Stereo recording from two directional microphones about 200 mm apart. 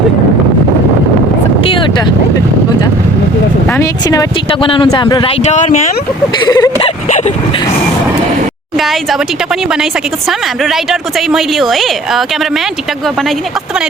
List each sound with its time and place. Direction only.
3.8 s speech: 20° left (ahead or behind)
5.5 s speech: 35° left (ahead or behind)
6.5 s speech: 20° left (ahead or behind)
10.2 s a woman's voice: centre (ahead or behind)